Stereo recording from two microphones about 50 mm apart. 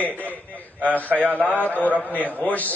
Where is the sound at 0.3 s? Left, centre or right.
Right.